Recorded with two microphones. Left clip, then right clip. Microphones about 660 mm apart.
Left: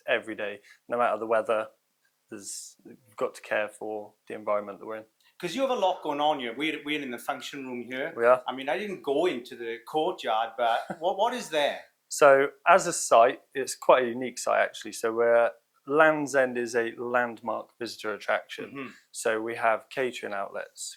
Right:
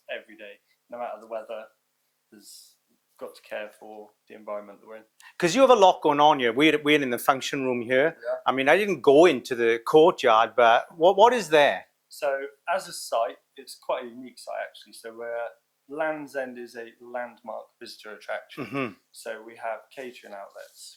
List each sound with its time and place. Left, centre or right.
0.1 s speech: left
3.2 s speech: left
5.4 s speech: right
12.2 s speech: left